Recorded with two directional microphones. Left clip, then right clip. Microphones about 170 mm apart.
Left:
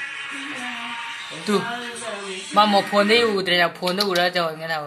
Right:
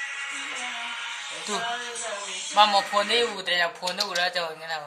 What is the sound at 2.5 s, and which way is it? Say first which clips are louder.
Speech: left 3 dB; 40° left (ahead or behind).